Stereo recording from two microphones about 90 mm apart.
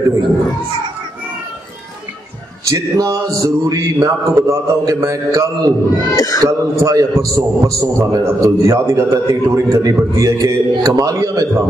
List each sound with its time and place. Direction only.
2.7 s a man's voice: 40° right (ahead or behind)
6.1 s speech: 40° left (ahead or behind)
6.4 s a man's voice: 40° right (ahead or behind)